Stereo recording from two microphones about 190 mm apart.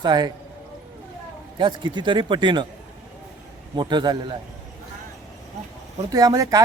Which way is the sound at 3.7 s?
25° right (ahead or behind).